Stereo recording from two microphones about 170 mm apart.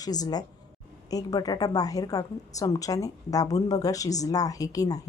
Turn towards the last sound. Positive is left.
turn(degrees=20)  # may be behind; listen again after turning